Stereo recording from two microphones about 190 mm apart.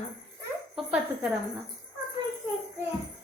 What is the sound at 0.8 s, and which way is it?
Speech, centre (ahead or behind).